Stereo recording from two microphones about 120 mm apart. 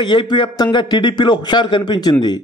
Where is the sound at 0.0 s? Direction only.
40° left (ahead or behind).